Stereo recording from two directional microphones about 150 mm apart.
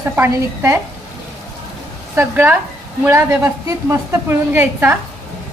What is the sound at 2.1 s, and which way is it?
A woman's voice, 15° right (ahead or behind).